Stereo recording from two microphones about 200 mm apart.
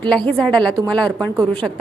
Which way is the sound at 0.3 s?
5° left (ahead or behind).